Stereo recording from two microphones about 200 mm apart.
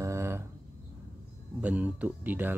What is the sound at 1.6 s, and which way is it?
Speech, 5° right (ahead or behind).